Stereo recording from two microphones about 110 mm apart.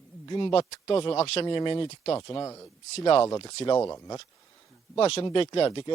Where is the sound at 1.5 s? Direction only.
45° left (ahead or behind).